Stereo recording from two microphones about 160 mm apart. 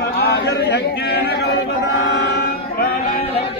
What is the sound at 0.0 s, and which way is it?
Chatter, 85° left.